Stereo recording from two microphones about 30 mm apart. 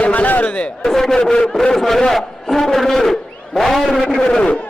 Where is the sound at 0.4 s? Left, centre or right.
Left.